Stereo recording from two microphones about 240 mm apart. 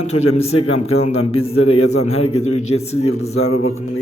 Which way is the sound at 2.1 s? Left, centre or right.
Left.